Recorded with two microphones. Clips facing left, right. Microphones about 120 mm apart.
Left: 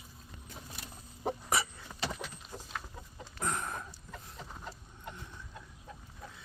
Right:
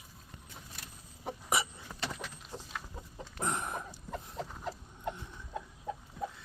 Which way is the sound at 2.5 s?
25° right (ahead or behind).